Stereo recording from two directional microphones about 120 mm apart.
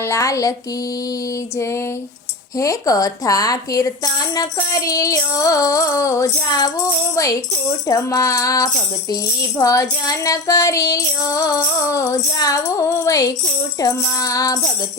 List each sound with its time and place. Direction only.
0.0 s music: 25° left (ahead or behind)
1.5 s music: 25° left (ahead or behind)